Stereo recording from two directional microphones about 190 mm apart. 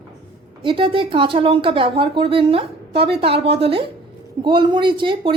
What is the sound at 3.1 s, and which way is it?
A woman's voice, 30° right (ahead or behind).